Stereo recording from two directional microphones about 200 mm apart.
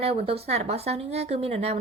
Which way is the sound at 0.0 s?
30° right (ahead or behind).